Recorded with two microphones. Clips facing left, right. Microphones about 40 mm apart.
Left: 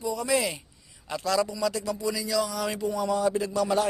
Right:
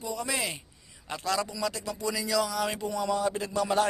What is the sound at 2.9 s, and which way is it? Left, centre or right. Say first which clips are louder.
Speech: left 2 dB; right.